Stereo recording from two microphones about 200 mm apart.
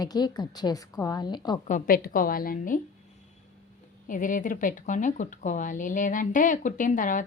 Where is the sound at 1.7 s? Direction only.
45° left (ahead or behind).